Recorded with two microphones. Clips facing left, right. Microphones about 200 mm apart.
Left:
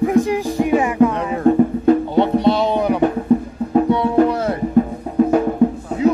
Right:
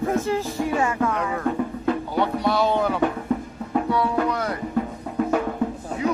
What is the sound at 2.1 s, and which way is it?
Music, 25° left (ahead or behind).